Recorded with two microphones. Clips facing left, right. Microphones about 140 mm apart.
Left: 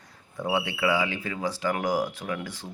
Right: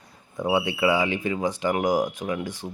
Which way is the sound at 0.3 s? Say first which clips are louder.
Right 4 dB; 15° right (ahead or behind).